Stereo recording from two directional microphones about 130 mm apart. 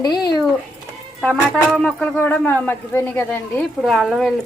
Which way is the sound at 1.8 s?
5° left (ahead or behind).